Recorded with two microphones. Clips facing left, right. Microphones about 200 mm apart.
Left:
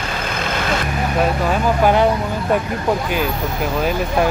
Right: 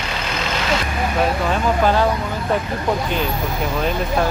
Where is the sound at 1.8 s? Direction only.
15° left (ahead or behind).